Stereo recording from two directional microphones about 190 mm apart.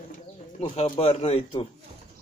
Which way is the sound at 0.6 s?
30° left (ahead or behind).